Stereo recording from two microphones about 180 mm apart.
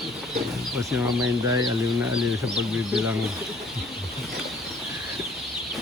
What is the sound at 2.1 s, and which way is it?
Speech, 5° right (ahead or behind).